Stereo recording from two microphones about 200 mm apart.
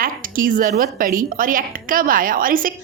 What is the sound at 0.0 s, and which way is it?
A woman's voice, 45° right (ahead or behind).